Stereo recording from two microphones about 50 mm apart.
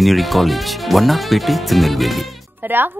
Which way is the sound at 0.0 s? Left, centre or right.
Centre.